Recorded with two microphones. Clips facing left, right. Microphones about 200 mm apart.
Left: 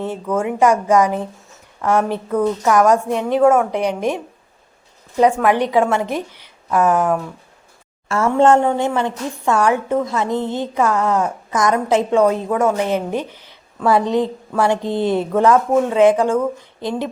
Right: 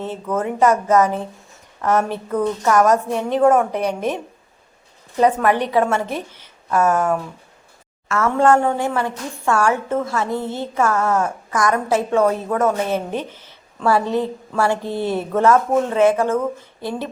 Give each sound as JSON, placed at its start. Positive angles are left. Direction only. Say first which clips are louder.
{"t": 0.3, "sound": "a woman's voice", "louder": "left 1 dB", "side_deg": 10}
{"t": 8.0, "sound": "a woman's voice", "louder": "left 2 dB", "side_deg": 30}